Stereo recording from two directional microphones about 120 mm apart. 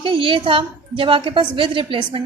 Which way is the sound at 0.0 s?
45° right (ahead or behind).